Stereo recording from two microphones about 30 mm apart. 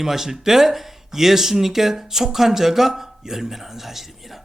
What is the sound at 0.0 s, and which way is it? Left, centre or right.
A man's voice, centre.